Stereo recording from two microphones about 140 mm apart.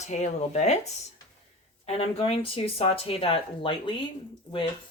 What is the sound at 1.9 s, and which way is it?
Speech, 45° left (ahead or behind).